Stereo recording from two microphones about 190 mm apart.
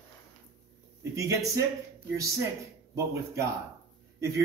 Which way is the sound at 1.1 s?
15° right (ahead or behind).